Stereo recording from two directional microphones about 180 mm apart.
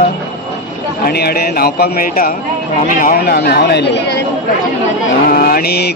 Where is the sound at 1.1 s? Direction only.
60° left (ahead or behind).